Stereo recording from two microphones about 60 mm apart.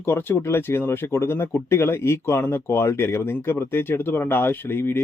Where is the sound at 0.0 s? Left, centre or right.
Left.